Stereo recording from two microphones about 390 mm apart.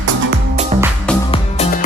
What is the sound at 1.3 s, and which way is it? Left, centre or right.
Music, centre.